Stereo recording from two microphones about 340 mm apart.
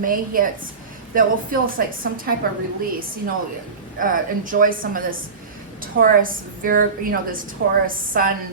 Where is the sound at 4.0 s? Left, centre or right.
Right.